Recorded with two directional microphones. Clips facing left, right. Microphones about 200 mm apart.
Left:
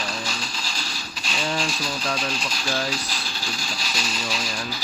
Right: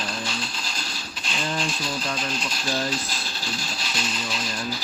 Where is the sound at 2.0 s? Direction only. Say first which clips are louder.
Left 2 dB; 5° right (ahead or behind).